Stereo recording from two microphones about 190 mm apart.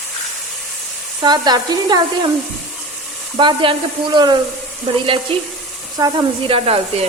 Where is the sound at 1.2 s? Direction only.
20° right (ahead or behind).